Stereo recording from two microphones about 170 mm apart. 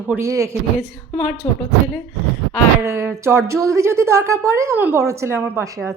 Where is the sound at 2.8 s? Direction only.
15° right (ahead or behind).